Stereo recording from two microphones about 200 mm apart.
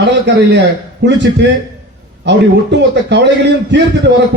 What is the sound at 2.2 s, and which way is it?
A man's voice, 60° right (ahead or behind).